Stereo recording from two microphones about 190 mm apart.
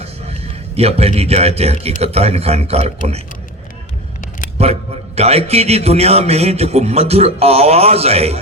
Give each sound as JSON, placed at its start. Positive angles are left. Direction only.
{"t": 0.8, "sound": "a man's voice", "side_deg": -30}
{"t": 4.5, "sound": "a man's voice", "side_deg": -35}